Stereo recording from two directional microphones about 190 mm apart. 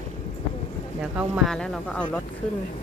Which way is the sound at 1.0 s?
5° right (ahead or behind).